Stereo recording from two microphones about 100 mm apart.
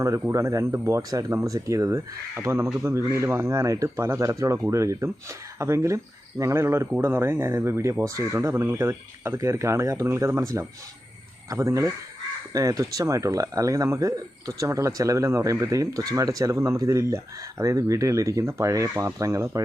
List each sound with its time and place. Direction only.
0.0 s speech: 35° right (ahead or behind)